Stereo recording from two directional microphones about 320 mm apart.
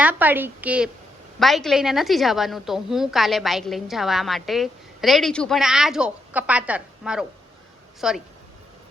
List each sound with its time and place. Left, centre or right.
0.0 s a woman's voice: centre